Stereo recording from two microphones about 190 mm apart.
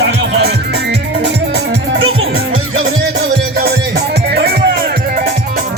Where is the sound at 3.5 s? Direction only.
55° right (ahead or behind).